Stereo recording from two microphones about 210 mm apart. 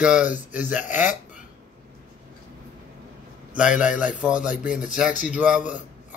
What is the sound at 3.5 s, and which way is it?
Speech, 35° left (ahead or behind).